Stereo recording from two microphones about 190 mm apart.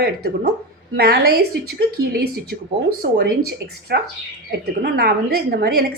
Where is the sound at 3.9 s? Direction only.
60° right (ahead or behind).